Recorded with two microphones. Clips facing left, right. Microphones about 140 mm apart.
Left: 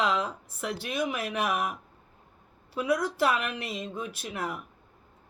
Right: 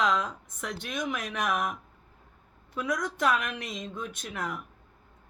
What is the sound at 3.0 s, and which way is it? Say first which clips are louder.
Speech: left 1 dB; 5° left (ahead or behind).